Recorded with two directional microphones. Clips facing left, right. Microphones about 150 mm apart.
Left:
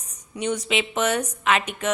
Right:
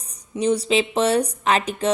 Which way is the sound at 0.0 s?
35° right (ahead or behind).